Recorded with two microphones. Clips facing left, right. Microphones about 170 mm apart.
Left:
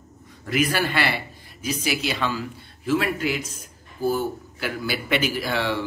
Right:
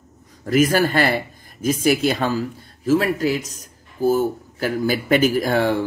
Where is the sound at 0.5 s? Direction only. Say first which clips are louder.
Right 7 dB; 40° right (ahead or behind).